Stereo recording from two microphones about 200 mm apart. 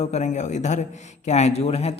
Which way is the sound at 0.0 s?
35° left (ahead or behind).